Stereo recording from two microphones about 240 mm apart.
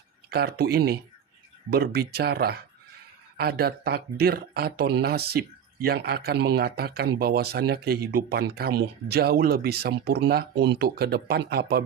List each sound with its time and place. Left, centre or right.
0.3 s speech: right